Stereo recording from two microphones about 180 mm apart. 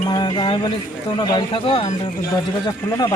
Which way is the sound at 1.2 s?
25° left (ahead or behind).